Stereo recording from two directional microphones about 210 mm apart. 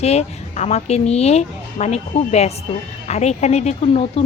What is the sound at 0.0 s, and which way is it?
A woman's voice, 30° left (ahead or behind).